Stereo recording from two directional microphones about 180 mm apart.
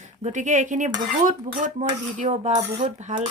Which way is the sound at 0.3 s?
45° right (ahead or behind).